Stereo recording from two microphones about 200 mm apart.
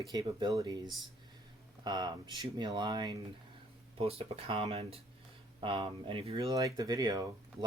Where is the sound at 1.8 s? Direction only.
20° right (ahead or behind).